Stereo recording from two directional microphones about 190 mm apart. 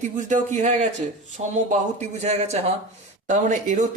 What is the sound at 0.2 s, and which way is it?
Speech, 40° right (ahead or behind).